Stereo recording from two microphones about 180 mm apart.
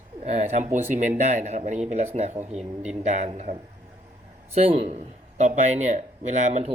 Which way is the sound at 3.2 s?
40° right (ahead or behind).